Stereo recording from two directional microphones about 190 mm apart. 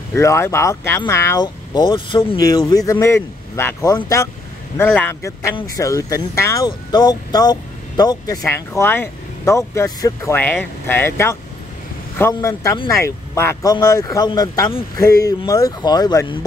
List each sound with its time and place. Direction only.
0.1 s speech: 15° left (ahead or behind)